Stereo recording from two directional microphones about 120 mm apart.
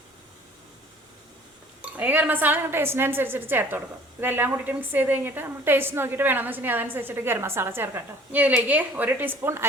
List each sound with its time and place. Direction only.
1.8 s speech: 15° right (ahead or behind)